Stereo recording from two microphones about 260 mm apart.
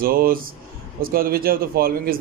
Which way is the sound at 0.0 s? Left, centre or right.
Right.